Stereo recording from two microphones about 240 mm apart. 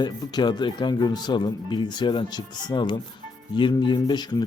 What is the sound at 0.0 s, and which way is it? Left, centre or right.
A man's voice, centre.